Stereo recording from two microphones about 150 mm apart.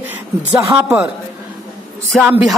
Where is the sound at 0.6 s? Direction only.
15° right (ahead or behind).